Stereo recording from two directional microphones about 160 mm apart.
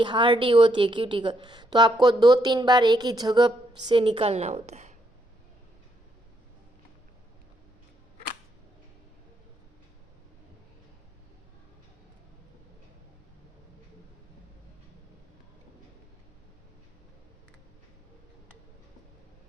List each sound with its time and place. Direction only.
0.0 s a woman's voice: 30° right (ahead or behind)